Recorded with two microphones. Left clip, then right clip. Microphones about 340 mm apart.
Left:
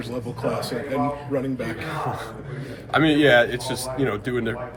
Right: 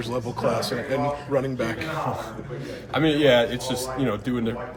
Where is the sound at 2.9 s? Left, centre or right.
Centre.